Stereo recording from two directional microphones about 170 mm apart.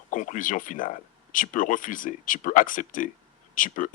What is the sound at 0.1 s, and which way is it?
Speech, 50° left (ahead or behind).